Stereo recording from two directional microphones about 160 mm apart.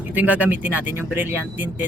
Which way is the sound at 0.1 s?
10° right (ahead or behind).